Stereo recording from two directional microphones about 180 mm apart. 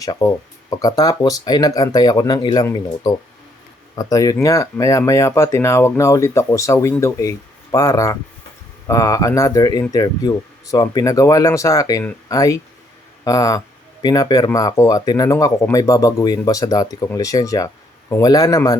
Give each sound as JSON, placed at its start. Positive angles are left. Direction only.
{"t": 0.0, "sound": "speech", "side_deg": 20}